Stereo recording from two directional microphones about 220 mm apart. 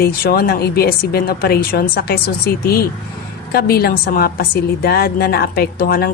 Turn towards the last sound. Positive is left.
turn(degrees=45)  # may be behind; listen again after turning